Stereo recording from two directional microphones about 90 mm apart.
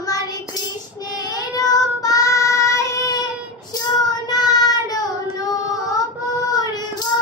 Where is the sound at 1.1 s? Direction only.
40° left (ahead or behind).